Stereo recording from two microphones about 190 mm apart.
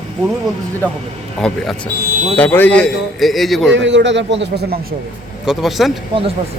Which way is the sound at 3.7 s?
75° right (ahead or behind).